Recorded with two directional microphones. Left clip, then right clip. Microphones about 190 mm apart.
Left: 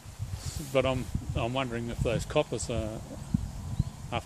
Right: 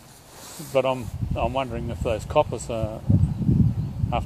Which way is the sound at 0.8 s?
30° left (ahead or behind).